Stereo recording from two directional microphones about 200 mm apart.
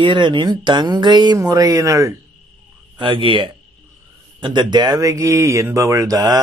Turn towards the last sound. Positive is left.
turn(degrees=-20)  # may be behind; listen again after turning